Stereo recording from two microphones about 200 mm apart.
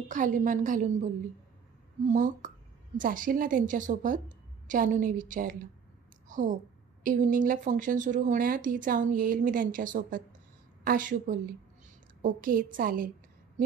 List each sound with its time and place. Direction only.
0.1 s a woman's voice: 40° right (ahead or behind)